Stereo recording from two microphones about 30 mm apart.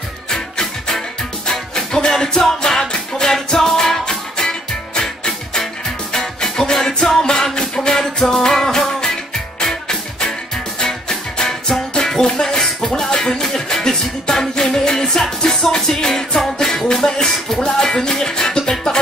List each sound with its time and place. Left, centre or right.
0.3 s music: centre
8.0 s music: centre